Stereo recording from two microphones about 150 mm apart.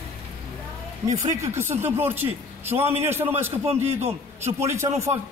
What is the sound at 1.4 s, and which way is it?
A man's voice, 15° right (ahead or behind).